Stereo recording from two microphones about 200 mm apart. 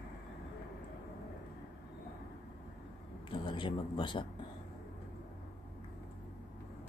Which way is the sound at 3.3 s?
25° left (ahead or behind).